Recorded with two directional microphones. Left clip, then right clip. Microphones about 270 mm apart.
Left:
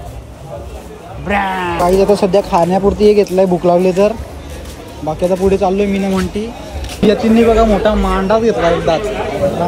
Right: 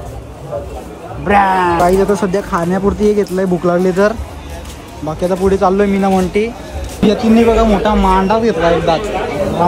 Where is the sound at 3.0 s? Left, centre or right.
Centre.